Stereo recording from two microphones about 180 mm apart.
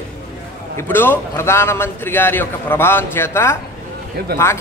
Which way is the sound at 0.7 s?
10° left (ahead or behind).